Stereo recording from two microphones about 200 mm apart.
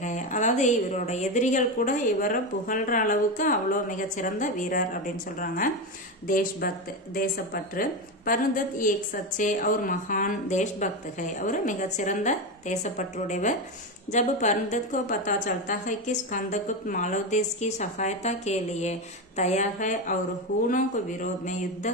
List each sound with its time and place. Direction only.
0.0 s a woman's voice: 35° left (ahead or behind)
8.3 s a woman's voice: 40° left (ahead or behind)